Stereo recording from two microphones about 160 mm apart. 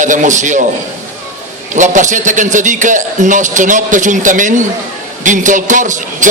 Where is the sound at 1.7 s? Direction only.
50° right (ahead or behind).